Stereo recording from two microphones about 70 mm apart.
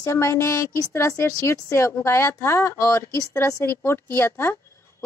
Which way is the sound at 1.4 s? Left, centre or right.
Left.